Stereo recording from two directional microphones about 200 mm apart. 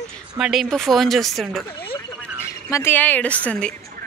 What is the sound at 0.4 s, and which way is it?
Speech, centre (ahead or behind).